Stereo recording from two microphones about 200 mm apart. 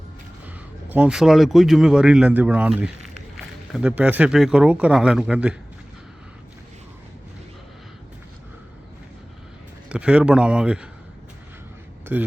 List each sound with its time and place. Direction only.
0.4 s speech: 10° right (ahead or behind)
9.9 s speech: 5° right (ahead or behind)
12.1 s speech: 10° right (ahead or behind)